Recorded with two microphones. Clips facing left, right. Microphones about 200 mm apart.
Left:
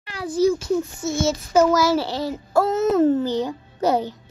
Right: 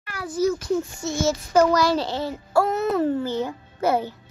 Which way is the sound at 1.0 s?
5° left (ahead or behind).